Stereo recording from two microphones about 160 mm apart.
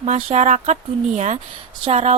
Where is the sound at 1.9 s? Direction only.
40° right (ahead or behind).